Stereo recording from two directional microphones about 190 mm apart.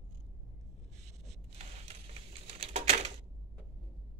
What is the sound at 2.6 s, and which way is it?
Typewriter, 35° right (ahead or behind).